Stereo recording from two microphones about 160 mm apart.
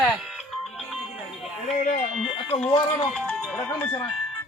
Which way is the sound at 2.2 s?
40° left (ahead or behind).